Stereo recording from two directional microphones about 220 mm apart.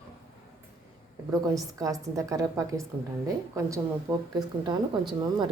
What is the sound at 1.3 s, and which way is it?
A woman's voice, 15° right (ahead or behind).